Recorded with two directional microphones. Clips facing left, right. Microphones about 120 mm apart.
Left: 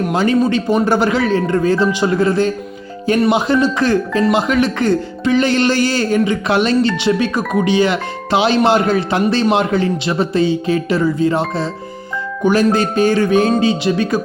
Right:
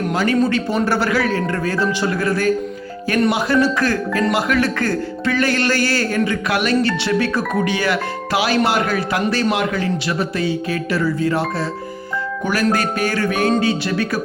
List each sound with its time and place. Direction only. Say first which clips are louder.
0.1 s speech: left 2 dB; 25° left (ahead or behind)